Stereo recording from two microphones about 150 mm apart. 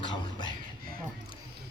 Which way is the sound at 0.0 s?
30° left (ahead or behind).